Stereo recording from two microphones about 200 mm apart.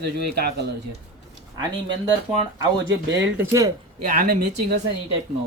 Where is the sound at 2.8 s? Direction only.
65° right (ahead or behind).